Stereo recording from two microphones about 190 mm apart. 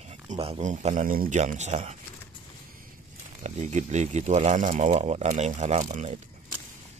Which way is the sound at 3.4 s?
35° right (ahead or behind).